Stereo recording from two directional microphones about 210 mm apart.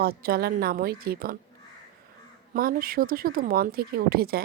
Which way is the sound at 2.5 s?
45° right (ahead or behind).